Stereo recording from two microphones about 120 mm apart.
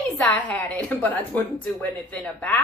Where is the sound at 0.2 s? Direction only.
10° left (ahead or behind).